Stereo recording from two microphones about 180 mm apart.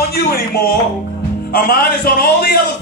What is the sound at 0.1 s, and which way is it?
Speech, 55° left (ahead or behind).